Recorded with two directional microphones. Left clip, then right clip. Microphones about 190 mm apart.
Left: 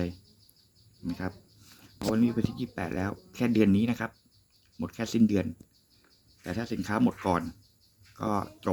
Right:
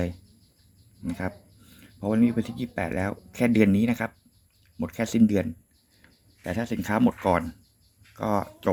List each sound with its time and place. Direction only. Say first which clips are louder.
1.0 s speech: right 4 dB; 15° right (ahead or behind)